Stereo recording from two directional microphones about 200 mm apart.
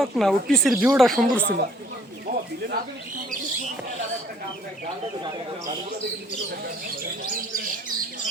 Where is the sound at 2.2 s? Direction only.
45° right (ahead or behind).